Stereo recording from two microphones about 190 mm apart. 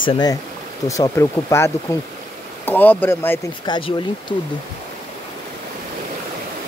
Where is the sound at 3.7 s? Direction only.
25° left (ahead or behind).